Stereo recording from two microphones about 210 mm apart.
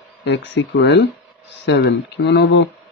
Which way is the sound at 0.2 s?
55° left (ahead or behind).